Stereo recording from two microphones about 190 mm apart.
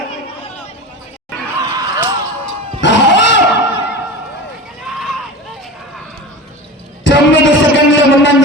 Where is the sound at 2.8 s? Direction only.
70° left (ahead or behind).